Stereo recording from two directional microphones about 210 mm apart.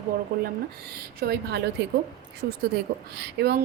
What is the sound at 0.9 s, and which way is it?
A woman's voice, 50° right (ahead or behind).